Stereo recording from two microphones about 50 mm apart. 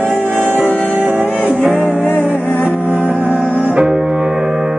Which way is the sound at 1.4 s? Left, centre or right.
Right.